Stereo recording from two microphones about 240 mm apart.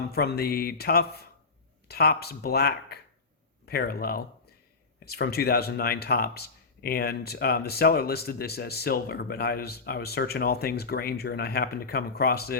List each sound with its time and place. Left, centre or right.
0.1 s speech: left